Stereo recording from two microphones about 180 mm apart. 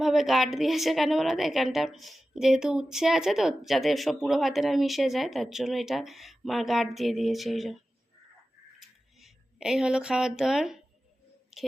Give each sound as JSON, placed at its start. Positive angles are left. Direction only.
{"t": 0.0, "sound": "a woman's voice", "side_deg": 0}
{"t": 9.1, "sound": "speech", "side_deg": 0}
{"t": 11.5, "sound": "a sound", "side_deg": 0}